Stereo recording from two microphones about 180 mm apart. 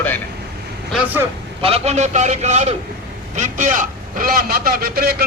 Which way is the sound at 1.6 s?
35° right (ahead or behind).